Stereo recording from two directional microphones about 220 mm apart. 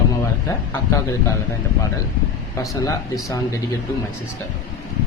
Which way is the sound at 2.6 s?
15° left (ahead or behind).